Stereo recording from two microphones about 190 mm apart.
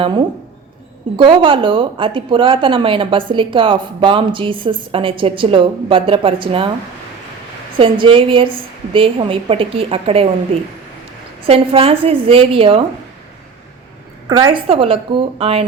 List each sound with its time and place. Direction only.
1.1 s a woman's voice: 25° right (ahead or behind)
7.8 s a woman's voice: 25° right (ahead or behind)
14.3 s a woman's voice: 20° right (ahead or behind)